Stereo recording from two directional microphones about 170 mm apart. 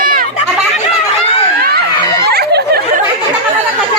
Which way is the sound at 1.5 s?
65° right (ahead or behind).